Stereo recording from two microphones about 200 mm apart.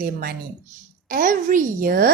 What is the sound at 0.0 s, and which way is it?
A woman's voice, 50° right (ahead or behind).